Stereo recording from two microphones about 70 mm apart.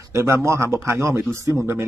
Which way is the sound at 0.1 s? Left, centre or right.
Right.